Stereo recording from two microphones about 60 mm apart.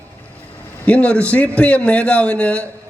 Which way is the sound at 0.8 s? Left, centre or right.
Left.